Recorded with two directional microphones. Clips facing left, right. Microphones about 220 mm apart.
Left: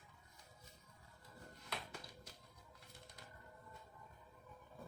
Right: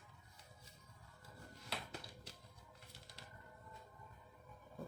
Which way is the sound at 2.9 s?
90° right.